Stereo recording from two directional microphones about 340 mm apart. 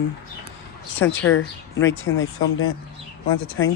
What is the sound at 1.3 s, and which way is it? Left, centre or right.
Speech, left.